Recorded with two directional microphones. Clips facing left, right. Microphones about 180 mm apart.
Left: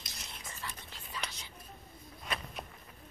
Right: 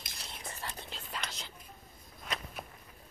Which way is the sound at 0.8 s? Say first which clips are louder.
Right 2 dB; 80° right.